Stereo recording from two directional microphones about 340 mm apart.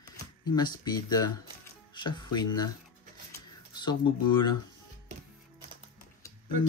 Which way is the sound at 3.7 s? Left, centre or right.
Centre.